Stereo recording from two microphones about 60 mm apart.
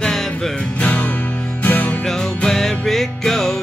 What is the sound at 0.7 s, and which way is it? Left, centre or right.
Music, left.